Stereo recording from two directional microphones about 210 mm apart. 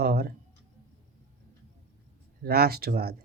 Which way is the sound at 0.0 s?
50° right (ahead or behind).